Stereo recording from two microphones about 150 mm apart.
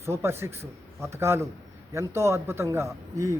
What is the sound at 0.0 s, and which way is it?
A man's voice, 15° right (ahead or behind).